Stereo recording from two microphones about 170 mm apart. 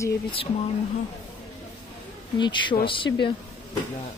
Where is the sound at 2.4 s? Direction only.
25° left (ahead or behind).